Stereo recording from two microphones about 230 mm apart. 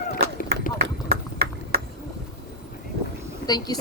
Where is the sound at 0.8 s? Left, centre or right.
Right.